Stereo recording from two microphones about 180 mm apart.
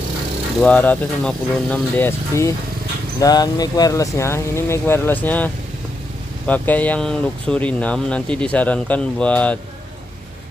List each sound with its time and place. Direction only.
0.6 s speech: 5° left (ahead or behind)